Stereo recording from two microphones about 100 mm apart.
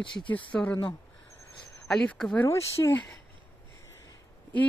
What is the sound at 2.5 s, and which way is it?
Speech, 25° left (ahead or behind).